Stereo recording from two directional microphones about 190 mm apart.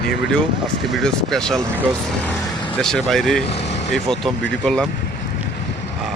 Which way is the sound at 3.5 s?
65° left (ahead or behind).